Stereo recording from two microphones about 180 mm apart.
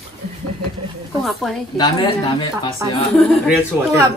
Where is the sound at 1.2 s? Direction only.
Centre (ahead or behind).